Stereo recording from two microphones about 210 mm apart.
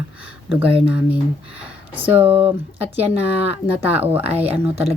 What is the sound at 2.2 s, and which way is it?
Speech, 25° right (ahead or behind).